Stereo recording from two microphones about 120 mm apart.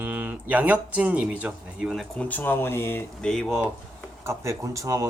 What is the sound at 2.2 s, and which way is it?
Speech, 15° left (ahead or behind).